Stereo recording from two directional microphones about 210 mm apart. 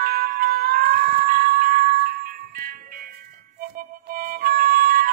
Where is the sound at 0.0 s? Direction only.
45° right (ahead or behind).